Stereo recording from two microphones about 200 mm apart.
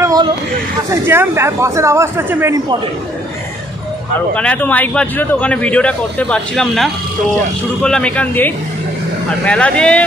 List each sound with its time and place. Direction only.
0.0 s a sound: 20° right (ahead or behind)
0.8 s speech: 10° right (ahead or behind)
4.4 s a man's voice: 5° left (ahead or behind)